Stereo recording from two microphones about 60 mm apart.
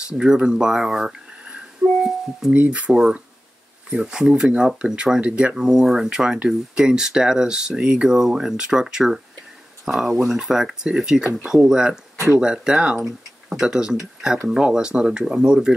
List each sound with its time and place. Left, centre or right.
0.2 s speech: centre
2.5 s speech: right
2.9 s speech: centre